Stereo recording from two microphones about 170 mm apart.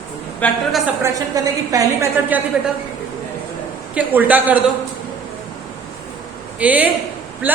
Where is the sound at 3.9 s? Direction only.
10° right (ahead or behind).